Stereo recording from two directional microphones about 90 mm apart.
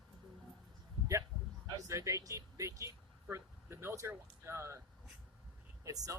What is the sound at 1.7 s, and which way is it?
Speech, 35° right (ahead or behind).